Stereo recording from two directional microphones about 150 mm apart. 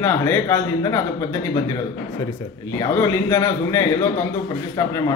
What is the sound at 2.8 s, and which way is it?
Speech, 25° left (ahead or behind).